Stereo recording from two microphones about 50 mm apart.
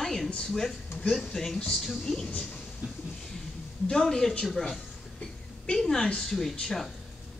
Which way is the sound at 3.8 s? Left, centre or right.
Centre.